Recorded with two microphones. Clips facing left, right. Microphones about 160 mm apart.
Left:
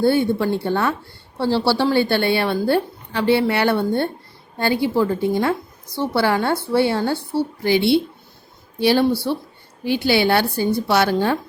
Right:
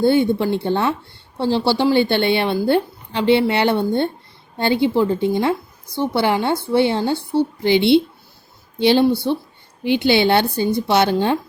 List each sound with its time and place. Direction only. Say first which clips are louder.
0.0 s a woman's voice: right 2 dB; 20° right (ahead or behind)